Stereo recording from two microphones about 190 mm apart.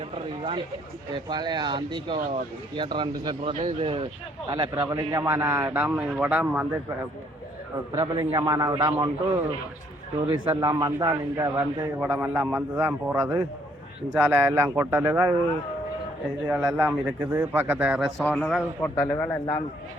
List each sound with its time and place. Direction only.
1.3 s speech: 20° right (ahead or behind)
7.9 s speech: 25° right (ahead or behind)
10.2 s speech: 25° right (ahead or behind)
16.5 s speech: 5° right (ahead or behind)
18.2 s speech: 5° left (ahead or behind)
18.9 s speech: 15° left (ahead or behind)